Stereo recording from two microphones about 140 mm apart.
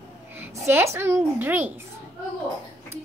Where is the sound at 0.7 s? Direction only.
15° right (ahead or behind).